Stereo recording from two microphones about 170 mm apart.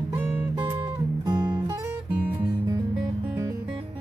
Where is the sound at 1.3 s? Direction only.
25° right (ahead or behind).